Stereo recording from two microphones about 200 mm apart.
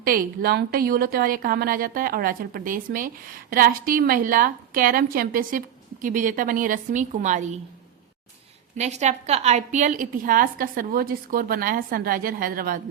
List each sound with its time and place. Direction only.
0.0 s a woman's voice: 50° right (ahead or behind)
8.8 s a woman's voice: 35° right (ahead or behind)